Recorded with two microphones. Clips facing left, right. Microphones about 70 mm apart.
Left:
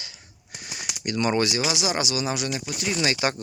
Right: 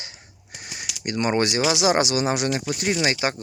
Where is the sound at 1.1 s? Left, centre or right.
Right.